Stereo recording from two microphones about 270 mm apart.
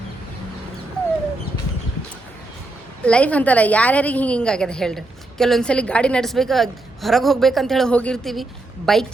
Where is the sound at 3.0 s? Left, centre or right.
Centre.